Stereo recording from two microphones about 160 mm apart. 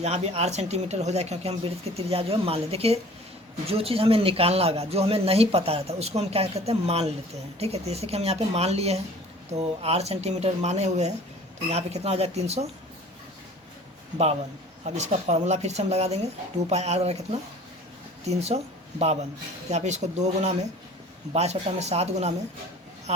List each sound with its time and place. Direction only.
0.0 s speech: 40° right (ahead or behind)
14.8 s speech: 45° right (ahead or behind)